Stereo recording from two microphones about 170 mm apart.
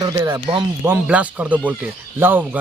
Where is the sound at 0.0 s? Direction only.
20° right (ahead or behind).